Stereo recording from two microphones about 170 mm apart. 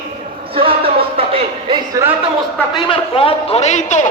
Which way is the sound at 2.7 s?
30° left (ahead or behind).